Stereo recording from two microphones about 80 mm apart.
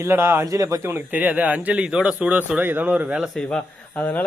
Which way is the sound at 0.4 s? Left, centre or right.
Right.